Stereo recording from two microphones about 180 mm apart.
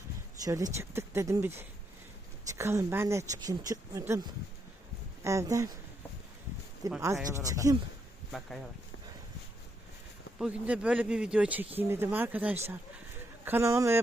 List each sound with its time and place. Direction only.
0.4 s speech: 20° right (ahead or behind)
7.0 s speech: 15° right (ahead or behind)
8.3 s speech: centre (ahead or behind)
10.3 s speech: 5° right (ahead or behind)